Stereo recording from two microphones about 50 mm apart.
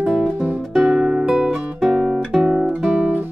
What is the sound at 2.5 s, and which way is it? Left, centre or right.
Guitar, right.